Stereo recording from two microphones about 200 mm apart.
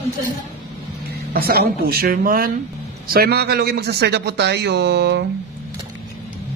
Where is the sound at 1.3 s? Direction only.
50° right (ahead or behind).